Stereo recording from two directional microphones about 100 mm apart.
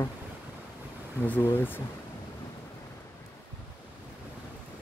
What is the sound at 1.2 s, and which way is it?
Speech, 20° left (ahead or behind).